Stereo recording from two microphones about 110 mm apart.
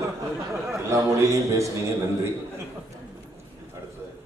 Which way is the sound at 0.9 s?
30° right (ahead or behind).